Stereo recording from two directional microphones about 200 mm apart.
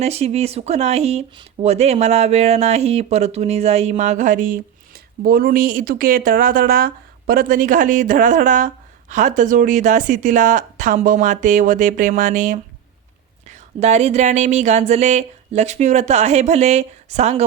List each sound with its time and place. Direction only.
0.0 s speech: 30° right (ahead or behind)